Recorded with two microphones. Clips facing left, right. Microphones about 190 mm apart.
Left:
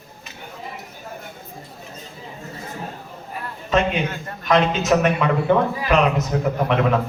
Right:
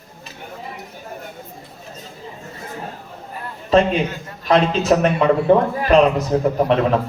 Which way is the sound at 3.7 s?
35° right (ahead or behind).